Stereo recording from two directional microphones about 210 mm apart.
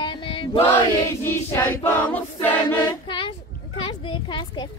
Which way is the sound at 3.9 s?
25° left (ahead or behind).